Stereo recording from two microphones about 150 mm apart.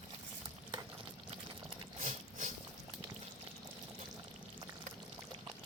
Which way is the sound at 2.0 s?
55° right (ahead or behind).